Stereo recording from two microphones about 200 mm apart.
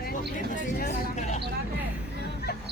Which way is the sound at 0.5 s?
35° left (ahead or behind).